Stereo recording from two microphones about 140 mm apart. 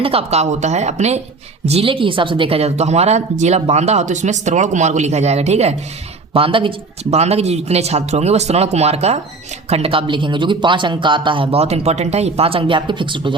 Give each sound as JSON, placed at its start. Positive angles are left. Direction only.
{"t": 0.0, "sound": "speech", "side_deg": -45}
{"t": 6.3, "sound": "speech", "side_deg": -40}